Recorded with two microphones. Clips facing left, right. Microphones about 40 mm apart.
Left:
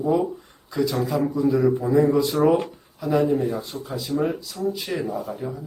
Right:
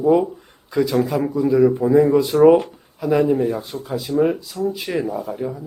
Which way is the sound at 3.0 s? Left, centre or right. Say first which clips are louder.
Right 4 dB; centre.